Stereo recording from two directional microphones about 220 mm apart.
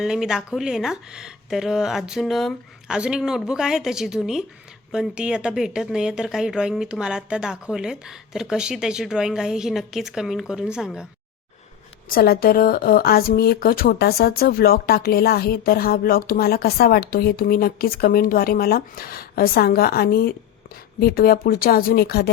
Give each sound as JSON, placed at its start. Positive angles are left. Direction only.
{"t": 0.0, "sound": "speech", "side_deg": 0}
{"t": 12.0, "sound": "speech", "side_deg": 40}